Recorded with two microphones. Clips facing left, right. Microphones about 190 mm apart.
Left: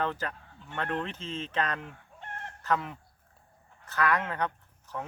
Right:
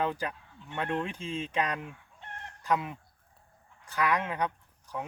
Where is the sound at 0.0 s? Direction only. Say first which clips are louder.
Right 1 dB; 15° right (ahead or behind).